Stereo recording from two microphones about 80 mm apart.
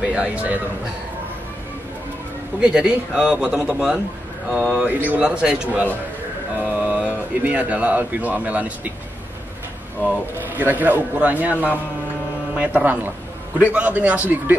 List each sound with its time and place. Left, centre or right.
0.0 s speech: centre
2.6 s speech: centre
4.8 s a man's voice: centre
10.3 s a man's voice: right
12.5 s a man's voice: centre